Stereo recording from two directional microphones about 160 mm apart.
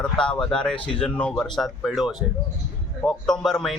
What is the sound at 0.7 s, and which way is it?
Speech, 35° left (ahead or behind).